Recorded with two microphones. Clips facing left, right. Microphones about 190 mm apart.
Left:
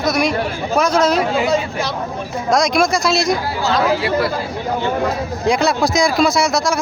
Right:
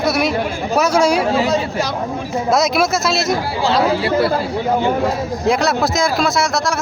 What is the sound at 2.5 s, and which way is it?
Speech, 5° right (ahead or behind).